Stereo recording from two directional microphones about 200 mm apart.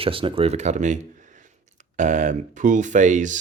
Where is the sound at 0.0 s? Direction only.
25° right (ahead or behind).